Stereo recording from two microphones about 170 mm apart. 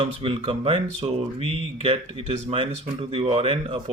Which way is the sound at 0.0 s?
30° right (ahead or behind).